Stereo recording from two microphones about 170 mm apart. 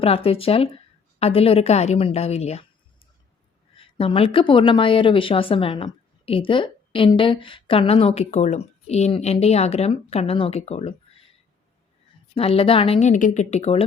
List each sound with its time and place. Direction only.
0.0 s a woman's voice: 35° left (ahead or behind)
3.8 s a woman's voice: 35° left (ahead or behind)
12.3 s a woman's voice: 35° left (ahead or behind)